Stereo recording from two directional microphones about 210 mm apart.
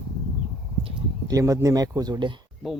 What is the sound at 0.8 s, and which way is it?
Speech, 15° right (ahead or behind).